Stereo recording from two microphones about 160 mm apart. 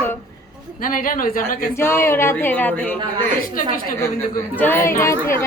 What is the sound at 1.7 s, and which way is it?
A woman's voice, 15° left (ahead or behind).